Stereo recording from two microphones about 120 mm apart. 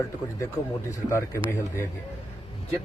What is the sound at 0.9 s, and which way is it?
Speech, 25° left (ahead or behind).